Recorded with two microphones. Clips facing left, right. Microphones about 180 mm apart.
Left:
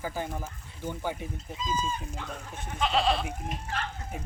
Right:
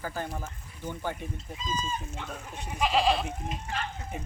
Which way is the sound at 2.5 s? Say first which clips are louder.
Even; 15° right (ahead or behind).